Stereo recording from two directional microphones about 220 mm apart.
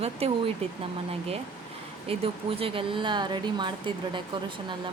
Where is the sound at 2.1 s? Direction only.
25° right (ahead or behind).